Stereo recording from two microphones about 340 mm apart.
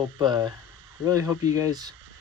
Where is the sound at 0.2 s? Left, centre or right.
Centre.